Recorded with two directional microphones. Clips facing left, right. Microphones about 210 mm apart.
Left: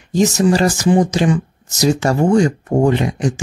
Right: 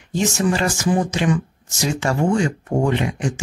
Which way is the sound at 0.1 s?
40° left (ahead or behind).